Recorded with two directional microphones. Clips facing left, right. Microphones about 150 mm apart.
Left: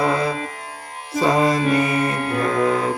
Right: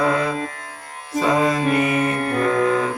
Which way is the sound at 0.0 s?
35° left (ahead or behind).